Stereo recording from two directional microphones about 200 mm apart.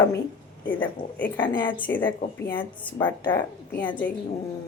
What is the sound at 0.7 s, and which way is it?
Speech, 10° left (ahead or behind).